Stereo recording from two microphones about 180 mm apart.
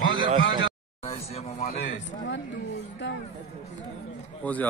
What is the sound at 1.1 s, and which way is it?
Vehicle, 35° left (ahead or behind).